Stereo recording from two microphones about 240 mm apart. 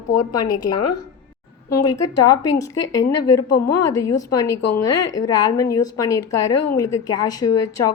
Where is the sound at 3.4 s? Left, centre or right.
Left.